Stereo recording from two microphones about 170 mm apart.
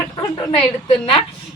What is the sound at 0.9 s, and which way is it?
Speech, 30° left (ahead or behind).